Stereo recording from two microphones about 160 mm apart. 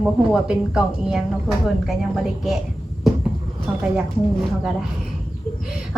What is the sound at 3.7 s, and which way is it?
Speech, 5° right (ahead or behind).